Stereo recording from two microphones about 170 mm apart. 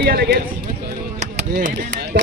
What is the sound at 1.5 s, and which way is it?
Speech, 55° right (ahead or behind).